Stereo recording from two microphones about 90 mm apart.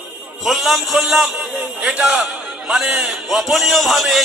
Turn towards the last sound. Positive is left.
turn(degrees=0)  # may be behind; listen again after turning